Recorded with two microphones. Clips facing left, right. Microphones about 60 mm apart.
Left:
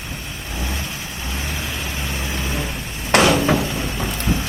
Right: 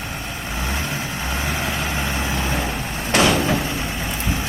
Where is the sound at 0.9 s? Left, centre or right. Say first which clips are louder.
Right 4 dB; right.